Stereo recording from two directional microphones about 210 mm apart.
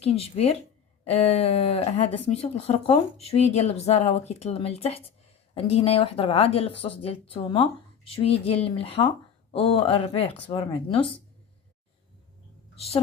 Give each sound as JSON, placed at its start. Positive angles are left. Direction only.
{"t": 0.0, "sound": "speech", "side_deg": 30}
{"t": 12.7, "sound": "a woman's voice", "side_deg": 30}